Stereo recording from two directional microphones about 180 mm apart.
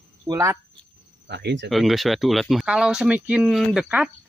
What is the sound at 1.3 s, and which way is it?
Speech, 70° right (ahead or behind).